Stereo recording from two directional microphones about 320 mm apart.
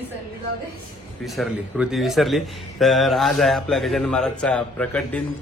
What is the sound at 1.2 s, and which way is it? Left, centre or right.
Speech, centre.